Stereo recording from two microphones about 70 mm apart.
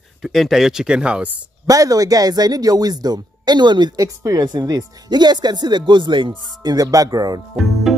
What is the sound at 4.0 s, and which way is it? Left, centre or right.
Speech, right.